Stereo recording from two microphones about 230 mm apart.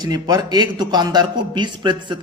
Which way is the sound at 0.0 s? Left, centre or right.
Centre.